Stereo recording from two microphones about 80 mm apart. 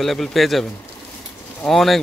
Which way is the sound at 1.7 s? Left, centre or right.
Centre.